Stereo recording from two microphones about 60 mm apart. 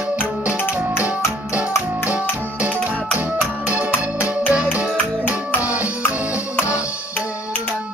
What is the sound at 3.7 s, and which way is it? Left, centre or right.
Music, right.